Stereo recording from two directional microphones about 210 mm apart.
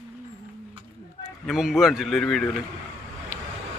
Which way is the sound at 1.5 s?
Centre (ahead or behind).